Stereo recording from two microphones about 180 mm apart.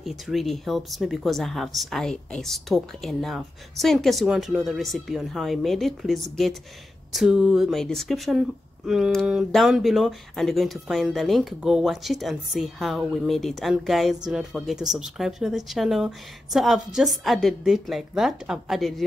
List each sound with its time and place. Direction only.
0.0 s speech: centre (ahead or behind)